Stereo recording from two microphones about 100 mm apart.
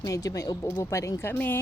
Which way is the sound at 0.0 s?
35° left (ahead or behind).